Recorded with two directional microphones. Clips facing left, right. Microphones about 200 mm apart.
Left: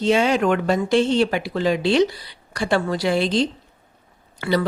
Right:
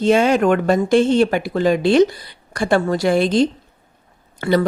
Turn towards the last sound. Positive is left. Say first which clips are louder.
# right 4 dB
turn(degrees=-50)  # may be behind; listen again after turning